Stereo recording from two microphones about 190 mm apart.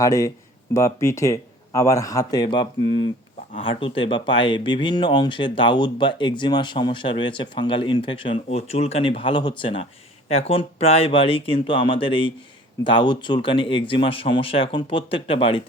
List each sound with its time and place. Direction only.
0.0 s speech: 15° left (ahead or behind)